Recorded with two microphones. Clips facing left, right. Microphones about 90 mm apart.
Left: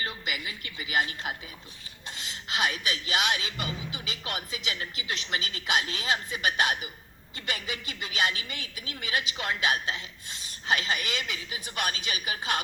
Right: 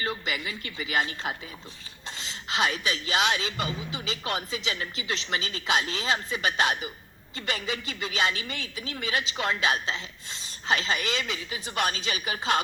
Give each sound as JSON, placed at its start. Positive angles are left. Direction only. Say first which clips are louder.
{"t": 0.0, "sound": "speech", "louder": "right 3 dB", "side_deg": -30}